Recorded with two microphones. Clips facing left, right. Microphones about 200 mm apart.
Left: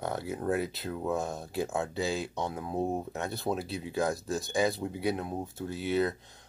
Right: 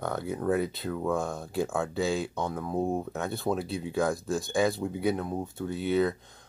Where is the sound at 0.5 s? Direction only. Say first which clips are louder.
Right 3 dB; centre (ahead or behind).